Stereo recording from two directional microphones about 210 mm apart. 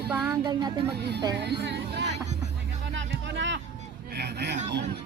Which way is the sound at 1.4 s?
50° right (ahead or behind).